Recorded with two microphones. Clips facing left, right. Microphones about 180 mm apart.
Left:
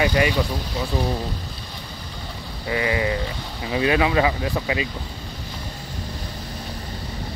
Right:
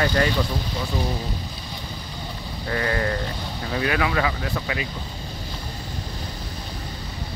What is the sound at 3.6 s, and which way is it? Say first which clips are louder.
Speech: left 4 dB; 20° left (ahead or behind).